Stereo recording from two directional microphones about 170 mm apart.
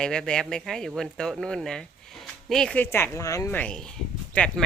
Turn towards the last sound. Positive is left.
turn(degrees=5)  # may be behind; listen again after turning